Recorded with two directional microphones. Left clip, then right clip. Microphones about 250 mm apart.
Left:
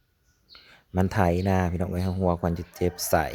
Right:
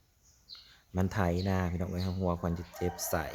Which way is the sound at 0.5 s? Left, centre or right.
Left.